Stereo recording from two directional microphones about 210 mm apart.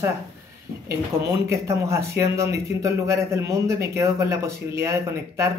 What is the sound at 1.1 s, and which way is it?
Speech, 10° right (ahead or behind).